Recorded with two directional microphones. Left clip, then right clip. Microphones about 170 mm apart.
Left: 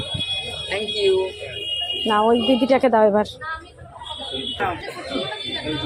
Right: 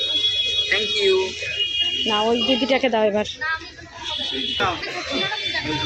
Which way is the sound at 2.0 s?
20° left (ahead or behind).